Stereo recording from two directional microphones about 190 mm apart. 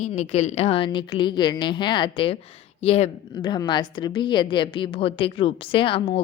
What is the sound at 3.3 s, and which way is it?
A woman's voice, 25° left (ahead or behind).